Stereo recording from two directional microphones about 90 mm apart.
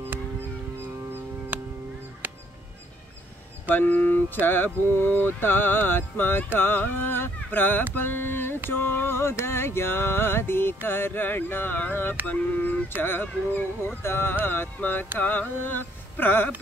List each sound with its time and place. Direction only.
0.7 s music: 25° right (ahead or behind)
3.6 s speech: 20° left (ahead or behind)
7.9 s mantra: 20° left (ahead or behind)
8.6 s speech: 25° left (ahead or behind)